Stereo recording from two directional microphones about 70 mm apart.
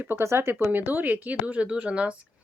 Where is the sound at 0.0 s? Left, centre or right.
Right.